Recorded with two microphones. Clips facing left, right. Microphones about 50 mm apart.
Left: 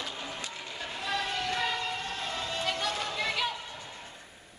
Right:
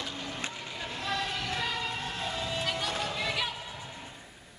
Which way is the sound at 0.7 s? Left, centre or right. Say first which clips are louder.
Left 1 dB; centre.